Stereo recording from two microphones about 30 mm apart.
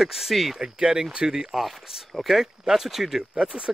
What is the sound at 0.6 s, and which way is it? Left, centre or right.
Speech, right.